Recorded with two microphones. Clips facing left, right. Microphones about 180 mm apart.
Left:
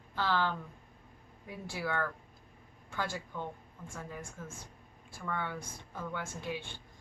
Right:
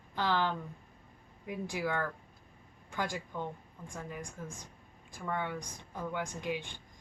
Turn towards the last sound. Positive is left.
turn(degrees=-15)  # may be behind; listen again after turning